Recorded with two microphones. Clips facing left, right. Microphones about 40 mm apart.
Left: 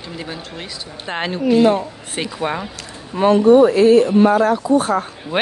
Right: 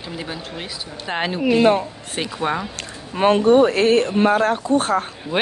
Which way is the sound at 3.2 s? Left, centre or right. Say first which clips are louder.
Left 3 dB; right.